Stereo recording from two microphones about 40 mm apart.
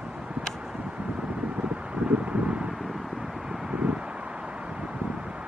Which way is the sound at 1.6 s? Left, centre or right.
Right.